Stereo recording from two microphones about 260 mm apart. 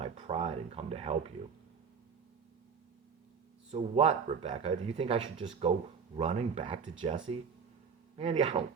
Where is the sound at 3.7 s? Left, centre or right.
Right.